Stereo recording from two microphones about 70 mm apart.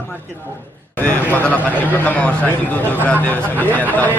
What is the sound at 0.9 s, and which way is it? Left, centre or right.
Speech, left.